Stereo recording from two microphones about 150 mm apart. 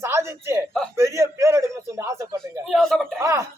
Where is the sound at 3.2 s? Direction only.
20° right (ahead or behind).